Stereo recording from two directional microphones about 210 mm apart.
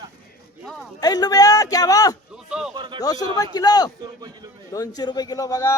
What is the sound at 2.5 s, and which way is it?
Speech, 5° right (ahead or behind).